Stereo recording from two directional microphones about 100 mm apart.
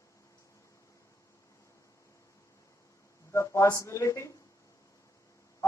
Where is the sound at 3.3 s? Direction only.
30° left (ahead or behind).